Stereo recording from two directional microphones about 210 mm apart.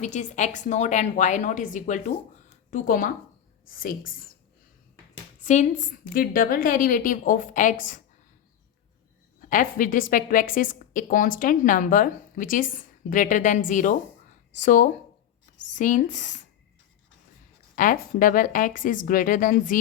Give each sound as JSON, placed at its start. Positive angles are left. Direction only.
{"t": 0.0, "sound": "a woman's voice", "side_deg": 35}
{"t": 5.4, "sound": "a woman's voice", "side_deg": 35}
{"t": 9.4, "sound": "a woman's voice", "side_deg": 40}
{"t": 17.7, "sound": "a woman's voice", "side_deg": 40}